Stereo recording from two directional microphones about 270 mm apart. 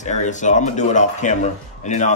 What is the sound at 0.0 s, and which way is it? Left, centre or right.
Speech, left.